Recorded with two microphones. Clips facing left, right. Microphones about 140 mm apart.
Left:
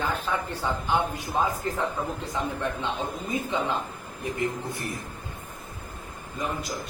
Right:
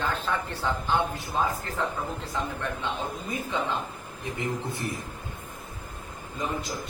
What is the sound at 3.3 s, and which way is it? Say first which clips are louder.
Speech: left 2 dB; 20° left (ahead or behind).